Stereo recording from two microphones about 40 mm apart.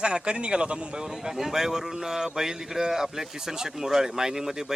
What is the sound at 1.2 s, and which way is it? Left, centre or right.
Speech, centre.